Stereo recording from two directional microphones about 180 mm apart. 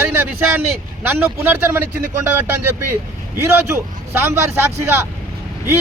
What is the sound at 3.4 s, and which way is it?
Speech, 15° right (ahead or behind).